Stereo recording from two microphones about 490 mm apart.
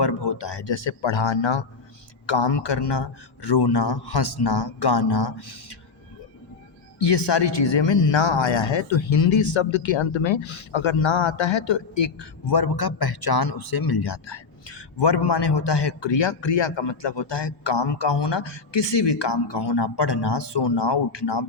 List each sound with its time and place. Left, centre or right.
0.0 s a man's voice: left
7.0 s speech: left